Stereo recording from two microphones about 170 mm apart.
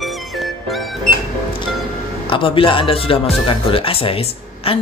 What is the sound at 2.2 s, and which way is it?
A man's voice, 30° left (ahead or behind).